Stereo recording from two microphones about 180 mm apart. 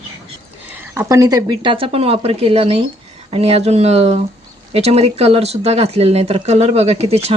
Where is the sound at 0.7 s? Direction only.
15° right (ahead or behind).